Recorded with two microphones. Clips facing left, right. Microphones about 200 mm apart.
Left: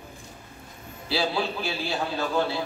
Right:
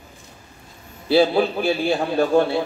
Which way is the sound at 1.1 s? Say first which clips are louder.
Right 10 dB; 55° right (ahead or behind).